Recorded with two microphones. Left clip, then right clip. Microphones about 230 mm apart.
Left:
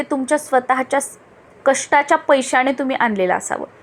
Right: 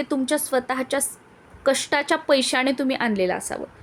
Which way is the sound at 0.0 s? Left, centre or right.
Centre.